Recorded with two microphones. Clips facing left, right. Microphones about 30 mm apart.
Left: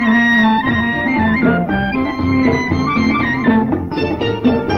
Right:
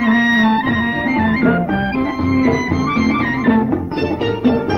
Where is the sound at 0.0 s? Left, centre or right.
Centre.